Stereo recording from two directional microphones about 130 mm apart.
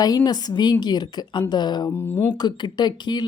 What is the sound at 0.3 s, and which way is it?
Speech, 30° left (ahead or behind).